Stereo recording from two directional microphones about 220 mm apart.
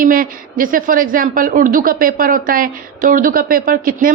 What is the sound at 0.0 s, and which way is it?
Speech, 40° right (ahead or behind).